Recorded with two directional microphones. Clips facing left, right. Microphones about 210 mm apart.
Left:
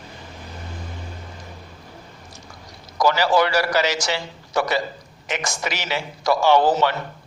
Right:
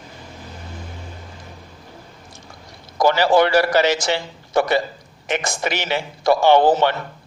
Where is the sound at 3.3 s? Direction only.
55° right (ahead or behind).